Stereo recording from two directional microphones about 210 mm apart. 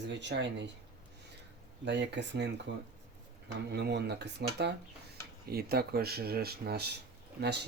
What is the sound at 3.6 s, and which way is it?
Speech, 50° right (ahead or behind).